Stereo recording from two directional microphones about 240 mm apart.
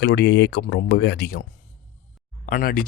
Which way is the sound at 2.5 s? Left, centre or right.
Left.